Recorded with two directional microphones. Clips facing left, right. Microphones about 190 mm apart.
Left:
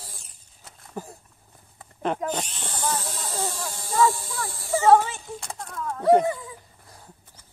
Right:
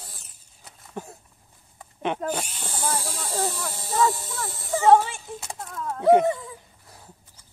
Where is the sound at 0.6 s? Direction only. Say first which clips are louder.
Even; centre (ahead or behind).